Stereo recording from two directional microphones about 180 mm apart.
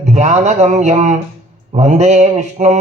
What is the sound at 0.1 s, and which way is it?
A man's voice, 40° right (ahead or behind).